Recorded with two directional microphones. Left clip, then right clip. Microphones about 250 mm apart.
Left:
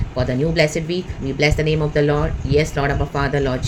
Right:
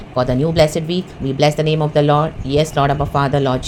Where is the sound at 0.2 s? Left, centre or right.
Centre.